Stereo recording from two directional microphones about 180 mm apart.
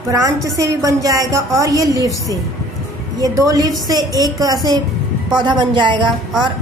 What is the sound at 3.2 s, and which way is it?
A woman's voice, 20° right (ahead or behind).